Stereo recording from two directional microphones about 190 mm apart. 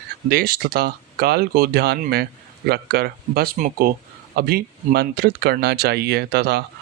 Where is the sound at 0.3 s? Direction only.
50° right (ahead or behind).